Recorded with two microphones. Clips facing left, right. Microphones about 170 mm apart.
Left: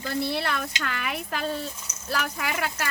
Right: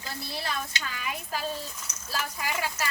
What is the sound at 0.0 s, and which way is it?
Speech, 65° left (ahead or behind).